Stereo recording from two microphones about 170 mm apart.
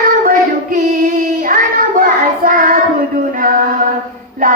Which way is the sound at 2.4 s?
55° right (ahead or behind).